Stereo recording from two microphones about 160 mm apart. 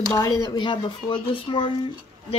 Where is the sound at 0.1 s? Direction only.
25° left (ahead or behind).